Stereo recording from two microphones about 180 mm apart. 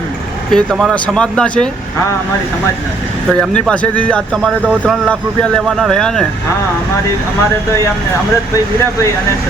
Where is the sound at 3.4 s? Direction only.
5° left (ahead or behind).